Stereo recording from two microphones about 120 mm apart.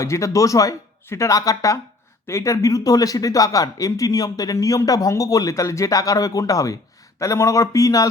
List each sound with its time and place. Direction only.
0.0 s speech: 25° left (ahead or behind)